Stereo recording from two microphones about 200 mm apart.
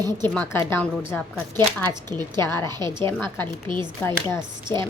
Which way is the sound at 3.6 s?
25° right (ahead or behind).